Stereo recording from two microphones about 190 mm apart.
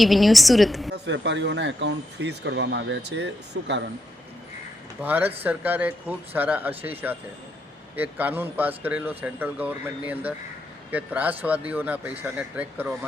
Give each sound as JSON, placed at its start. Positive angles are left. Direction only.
{"t": 0.0, "sound": "a woman's voice", "side_deg": 0}
{"t": 0.9, "sound": "speech", "side_deg": -70}
{"t": 5.0, "sound": "speech", "side_deg": -10}
{"t": 7.9, "sound": "speech", "side_deg": -10}